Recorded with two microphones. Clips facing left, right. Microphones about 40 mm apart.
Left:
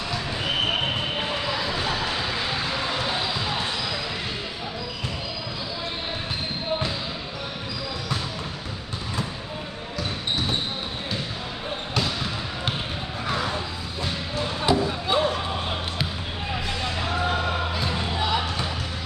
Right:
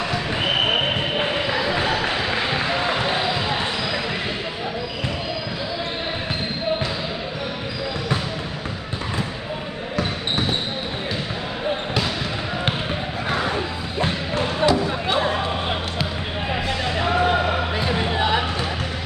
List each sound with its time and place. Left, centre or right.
0.4 s basketball bounce: right
13.3 s music: right
13.9 s music: right
14.9 s music: centre
17.0 s music: right